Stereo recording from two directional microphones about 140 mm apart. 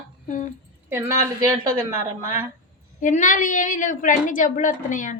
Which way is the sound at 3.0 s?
70° left (ahead or behind).